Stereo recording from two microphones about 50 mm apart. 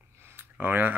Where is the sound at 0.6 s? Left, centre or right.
Right.